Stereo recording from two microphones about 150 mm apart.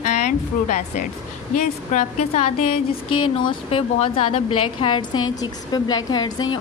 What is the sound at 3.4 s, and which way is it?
A woman's voice, 35° left (ahead or behind).